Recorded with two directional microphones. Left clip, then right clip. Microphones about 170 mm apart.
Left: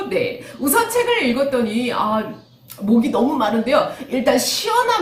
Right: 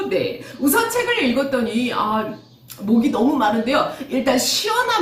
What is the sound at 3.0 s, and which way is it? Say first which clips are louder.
A woman's voice: right 3 dB; 20° left (ahead or behind).